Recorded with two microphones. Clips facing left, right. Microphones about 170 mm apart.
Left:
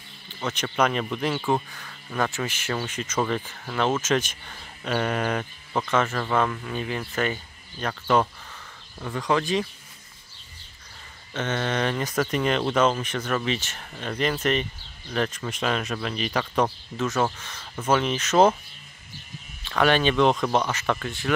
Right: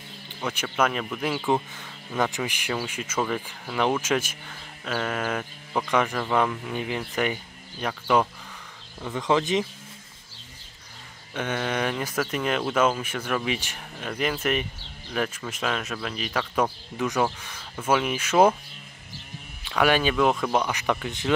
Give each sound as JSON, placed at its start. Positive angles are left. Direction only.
{"t": 0.4, "sound": "speech", "side_deg": -10}
{"t": 1.5, "sound": "speech", "side_deg": -20}
{"t": 11.3, "sound": "speech", "side_deg": -10}
{"t": 16.9, "sound": "speech", "side_deg": -15}
{"t": 19.6, "sound": "speech", "side_deg": -10}